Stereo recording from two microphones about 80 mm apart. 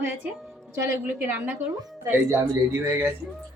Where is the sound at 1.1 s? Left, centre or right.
Right.